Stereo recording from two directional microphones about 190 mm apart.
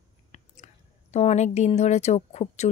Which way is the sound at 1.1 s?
35° left (ahead or behind).